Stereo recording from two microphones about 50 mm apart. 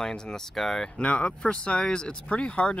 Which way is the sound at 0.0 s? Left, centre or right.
Centre.